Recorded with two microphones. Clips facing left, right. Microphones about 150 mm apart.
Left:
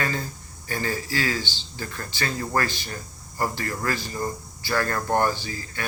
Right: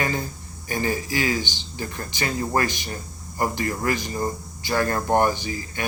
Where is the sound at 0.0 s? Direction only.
20° right (ahead or behind).